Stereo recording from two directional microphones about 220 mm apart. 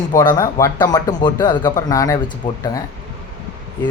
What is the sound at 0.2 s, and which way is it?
Speech, 15° left (ahead or behind).